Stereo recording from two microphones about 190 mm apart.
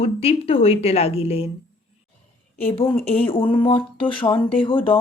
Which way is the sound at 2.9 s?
10° left (ahead or behind).